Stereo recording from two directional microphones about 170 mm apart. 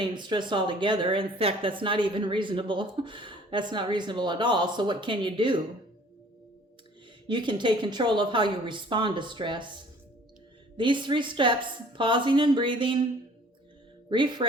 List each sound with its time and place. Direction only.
0.0 s speech: 25° right (ahead or behind)
7.3 s speech: 25° right (ahead or behind)
10.8 s speech: 30° right (ahead or behind)
14.1 s speech: 30° right (ahead or behind)